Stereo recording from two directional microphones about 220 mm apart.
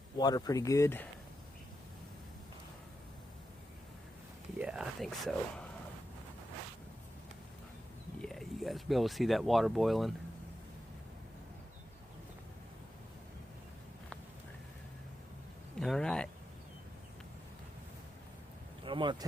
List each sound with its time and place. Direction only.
0.2 s speech: 20° left (ahead or behind)
4.5 s a sound: 5° right (ahead or behind)
8.2 s speech: centre (ahead or behind)
15.7 s speech: 5° left (ahead or behind)
18.9 s speech: 20° right (ahead or behind)